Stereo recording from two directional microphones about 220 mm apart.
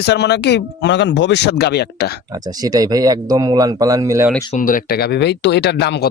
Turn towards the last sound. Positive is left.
turn(degrees=50)  # may be behind; listen again after turning